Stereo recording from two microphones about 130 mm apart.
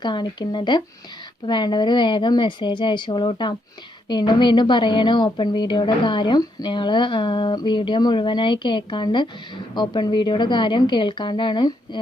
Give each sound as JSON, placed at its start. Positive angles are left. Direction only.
{"t": 0.0, "sound": "a woman's voice", "side_deg": 35}